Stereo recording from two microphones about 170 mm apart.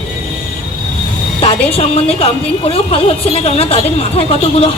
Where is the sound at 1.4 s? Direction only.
35° left (ahead or behind).